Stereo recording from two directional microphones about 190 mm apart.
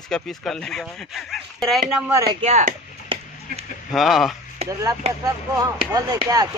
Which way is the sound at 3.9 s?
Centre (ahead or behind).